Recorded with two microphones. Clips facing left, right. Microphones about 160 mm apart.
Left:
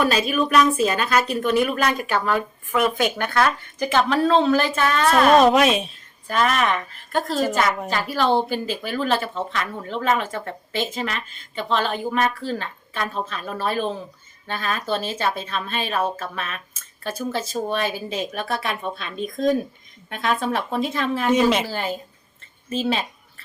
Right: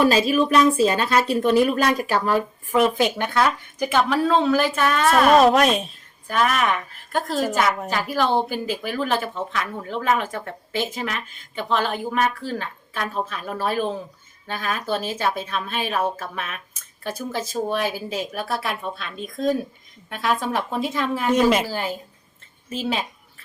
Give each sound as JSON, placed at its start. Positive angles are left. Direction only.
{"t": 0.0, "sound": "speech", "side_deg": -30}
{"t": 3.2, "sound": "a woman's voice", "side_deg": -15}